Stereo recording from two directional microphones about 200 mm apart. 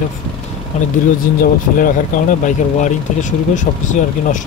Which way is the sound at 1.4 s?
45° left (ahead or behind).